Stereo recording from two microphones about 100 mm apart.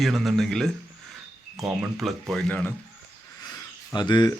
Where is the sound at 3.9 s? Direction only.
45° left (ahead or behind).